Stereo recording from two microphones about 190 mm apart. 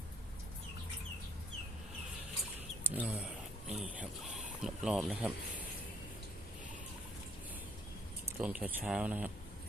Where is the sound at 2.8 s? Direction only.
5° right (ahead or behind).